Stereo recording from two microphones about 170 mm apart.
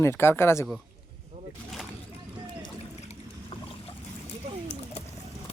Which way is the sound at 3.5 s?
30° left (ahead or behind).